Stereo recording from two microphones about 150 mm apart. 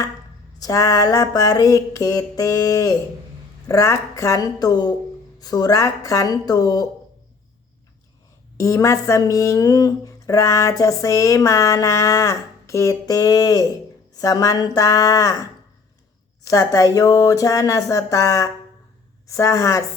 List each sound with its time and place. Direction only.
0.6 s speech: 20° left (ahead or behind)
8.5 s speech: 20° left (ahead or behind)